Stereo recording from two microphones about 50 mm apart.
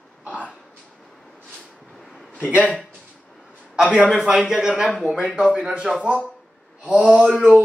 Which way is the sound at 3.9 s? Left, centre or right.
Centre.